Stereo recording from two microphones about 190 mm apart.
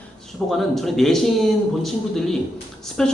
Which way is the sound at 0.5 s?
Centre (ahead or behind).